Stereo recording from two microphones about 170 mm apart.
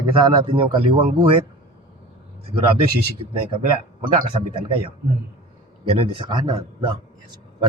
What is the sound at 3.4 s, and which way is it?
Speech, 30° right (ahead or behind).